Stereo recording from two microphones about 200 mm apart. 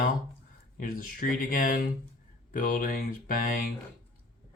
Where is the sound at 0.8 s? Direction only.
45° left (ahead or behind).